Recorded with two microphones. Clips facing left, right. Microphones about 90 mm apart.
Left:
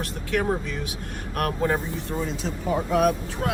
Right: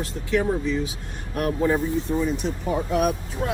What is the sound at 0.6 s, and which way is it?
Speech, 60° left (ahead or behind).